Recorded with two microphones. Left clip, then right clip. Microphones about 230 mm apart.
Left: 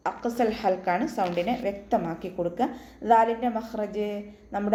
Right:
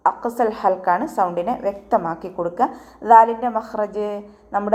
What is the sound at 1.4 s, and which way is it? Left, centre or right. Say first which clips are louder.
A woman's voice: right 6 dB; centre.